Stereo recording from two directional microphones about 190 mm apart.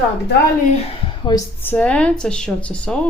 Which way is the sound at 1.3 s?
15° left (ahead or behind).